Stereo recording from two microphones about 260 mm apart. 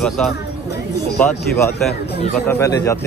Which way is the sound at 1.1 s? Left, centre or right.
Centre.